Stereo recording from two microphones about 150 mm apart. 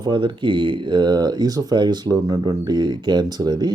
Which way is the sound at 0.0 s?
30° right (ahead or behind).